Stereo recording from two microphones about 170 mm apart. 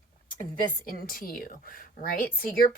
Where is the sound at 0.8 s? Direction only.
55° left (ahead or behind).